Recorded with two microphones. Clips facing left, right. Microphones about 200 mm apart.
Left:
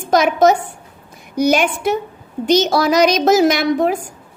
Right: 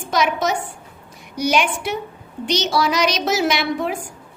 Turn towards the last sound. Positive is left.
turn(degrees=40)  # may be behind; listen again after turning